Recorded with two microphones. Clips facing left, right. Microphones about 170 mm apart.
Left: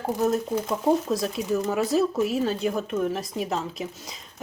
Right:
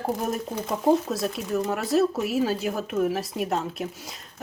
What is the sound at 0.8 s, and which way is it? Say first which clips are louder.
Speech: right 2 dB; centre (ahead or behind).